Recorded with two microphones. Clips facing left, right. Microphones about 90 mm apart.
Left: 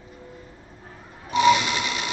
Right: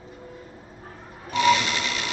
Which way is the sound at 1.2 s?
20° left (ahead or behind).